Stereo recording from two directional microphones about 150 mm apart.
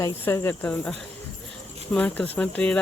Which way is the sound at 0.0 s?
20° left (ahead or behind).